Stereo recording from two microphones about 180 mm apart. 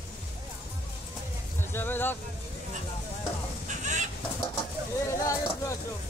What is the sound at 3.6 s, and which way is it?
Fowl, 40° right (ahead or behind).